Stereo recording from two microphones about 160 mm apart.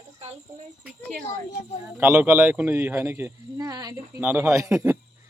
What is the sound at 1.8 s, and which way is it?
Speech, 15° right (ahead or behind).